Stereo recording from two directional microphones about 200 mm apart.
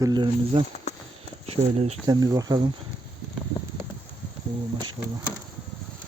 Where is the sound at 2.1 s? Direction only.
20° right (ahead or behind).